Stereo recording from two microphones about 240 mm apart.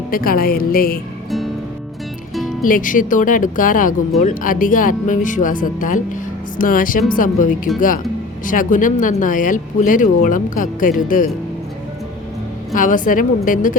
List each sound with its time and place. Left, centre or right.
0.1 s speech: left
2.3 s music: centre
2.6 s speech: left
12.7 s speech: left